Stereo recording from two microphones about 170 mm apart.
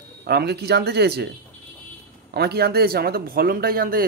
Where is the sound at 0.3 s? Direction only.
75° right (ahead or behind).